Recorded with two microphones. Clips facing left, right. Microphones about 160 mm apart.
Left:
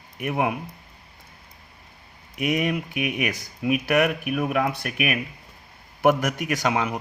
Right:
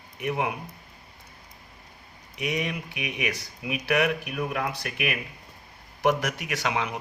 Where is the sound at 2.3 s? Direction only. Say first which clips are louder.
Left 6 dB; 50° left (ahead or behind).